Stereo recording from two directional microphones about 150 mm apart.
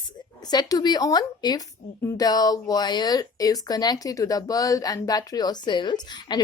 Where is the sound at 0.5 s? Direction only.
30° left (ahead or behind).